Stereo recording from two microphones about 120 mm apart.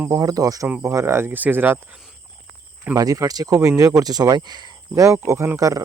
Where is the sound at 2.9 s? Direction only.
30° right (ahead or behind).